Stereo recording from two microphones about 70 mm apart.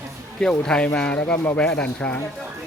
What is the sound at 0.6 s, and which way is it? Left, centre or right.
Speech, centre.